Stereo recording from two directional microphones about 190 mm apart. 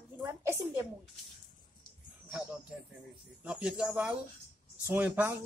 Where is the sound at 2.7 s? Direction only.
5° right (ahead or behind).